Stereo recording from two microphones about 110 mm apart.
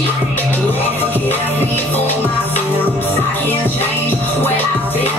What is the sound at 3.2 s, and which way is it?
Music, 15° left (ahead or behind).